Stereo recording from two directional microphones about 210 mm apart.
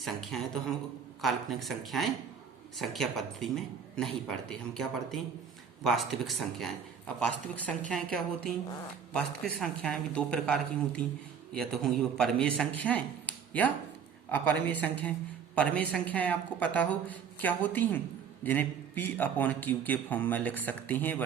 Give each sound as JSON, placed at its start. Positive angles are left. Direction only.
{"t": 0.0, "sound": "a man's voice", "side_deg": 0}